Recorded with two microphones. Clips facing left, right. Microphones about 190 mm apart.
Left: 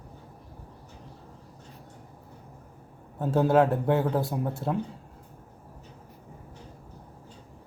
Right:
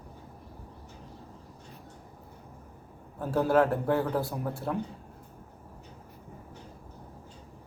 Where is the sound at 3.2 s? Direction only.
25° left (ahead or behind).